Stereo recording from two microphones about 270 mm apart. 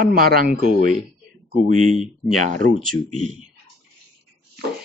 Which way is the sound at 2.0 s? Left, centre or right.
Right.